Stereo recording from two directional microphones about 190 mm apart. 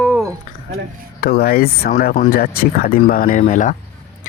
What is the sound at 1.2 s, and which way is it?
Speech, 55° left (ahead or behind).